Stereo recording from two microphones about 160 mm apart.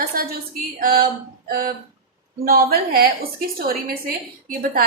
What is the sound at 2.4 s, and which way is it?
A woman's voice, 70° right (ahead or behind).